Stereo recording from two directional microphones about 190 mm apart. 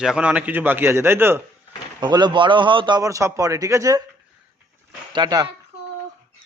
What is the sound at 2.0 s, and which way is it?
A man's voice, 25° right (ahead or behind).